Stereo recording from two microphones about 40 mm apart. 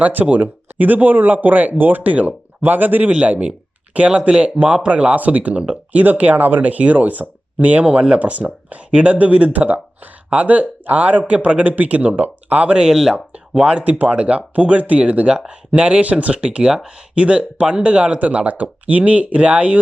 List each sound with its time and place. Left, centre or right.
0.0 s speech: right
3.1 s a man's voice: right
12.9 s speech: centre
13.8 s speech: right